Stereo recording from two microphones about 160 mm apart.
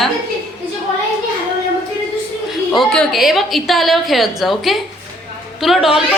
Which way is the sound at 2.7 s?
5° left (ahead or behind).